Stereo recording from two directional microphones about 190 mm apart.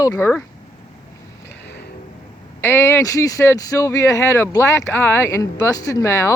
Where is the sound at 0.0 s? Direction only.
15° left (ahead or behind).